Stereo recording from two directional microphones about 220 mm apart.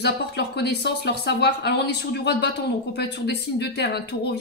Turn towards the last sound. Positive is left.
turn(degrees=50)  # may be behind; listen again after turning